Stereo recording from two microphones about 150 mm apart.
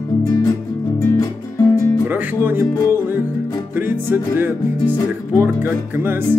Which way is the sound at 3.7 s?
15° right (ahead or behind).